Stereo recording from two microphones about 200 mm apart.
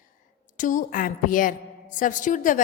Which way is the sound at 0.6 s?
40° left (ahead or behind).